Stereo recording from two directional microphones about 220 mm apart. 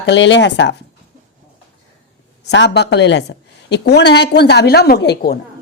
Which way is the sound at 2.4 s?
50° left (ahead or behind).